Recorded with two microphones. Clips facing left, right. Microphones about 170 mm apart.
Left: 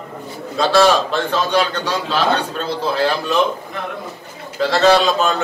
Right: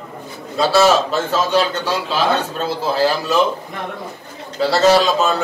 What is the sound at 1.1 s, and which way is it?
Speech, 40° right (ahead or behind).